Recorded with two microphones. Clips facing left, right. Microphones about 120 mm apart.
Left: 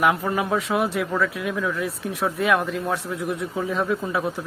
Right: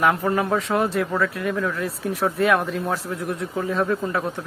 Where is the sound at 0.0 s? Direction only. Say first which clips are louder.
Right 1 dB; centre (ahead or behind).